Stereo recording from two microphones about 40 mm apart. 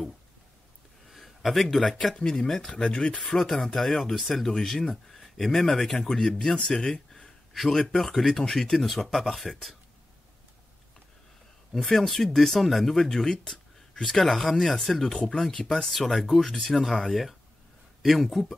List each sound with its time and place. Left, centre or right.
1.0 s speech: centre
2.2 s speech: centre
3.3 s speech: centre
6.8 s a sound: centre
7.9 s speech: centre
11.7 s speech: centre
13.3 s a sound: centre
14.1 s speech: centre